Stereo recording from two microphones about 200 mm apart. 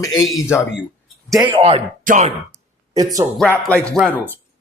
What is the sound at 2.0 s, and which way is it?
Speech, 40° right (ahead or behind).